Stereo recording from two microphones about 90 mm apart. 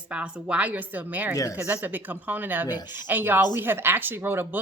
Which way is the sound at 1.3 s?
40° left (ahead or behind).